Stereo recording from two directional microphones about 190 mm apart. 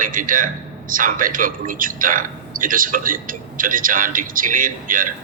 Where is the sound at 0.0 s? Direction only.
45° right (ahead or behind).